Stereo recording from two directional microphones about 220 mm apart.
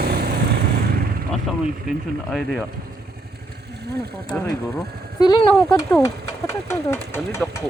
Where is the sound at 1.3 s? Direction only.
Centre (ahead or behind).